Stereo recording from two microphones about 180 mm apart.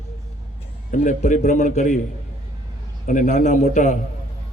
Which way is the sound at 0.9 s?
40° left (ahead or behind).